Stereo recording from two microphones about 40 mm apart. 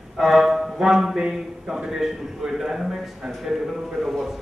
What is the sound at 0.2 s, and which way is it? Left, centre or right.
A man's voice, centre.